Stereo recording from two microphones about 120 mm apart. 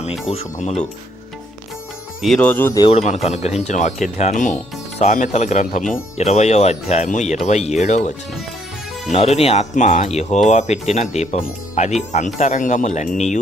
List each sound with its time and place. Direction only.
0.3 s speech: 60° left (ahead or behind)
2.4 s speech: 15° left (ahead or behind)
2.9 s speech: 70° left (ahead or behind)
5.9 s speech: 65° left (ahead or behind)
9.3 s speech: 65° left (ahead or behind); by 13.4 s 80° left